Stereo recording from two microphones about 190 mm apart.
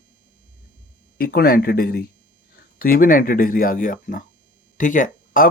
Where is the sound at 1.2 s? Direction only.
50° left (ahead or behind).